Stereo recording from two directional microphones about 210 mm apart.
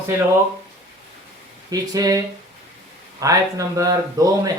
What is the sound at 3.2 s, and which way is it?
Speech, 15° right (ahead or behind).